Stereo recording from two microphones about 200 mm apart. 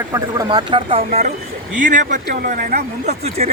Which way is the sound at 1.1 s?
40° right (ahead or behind).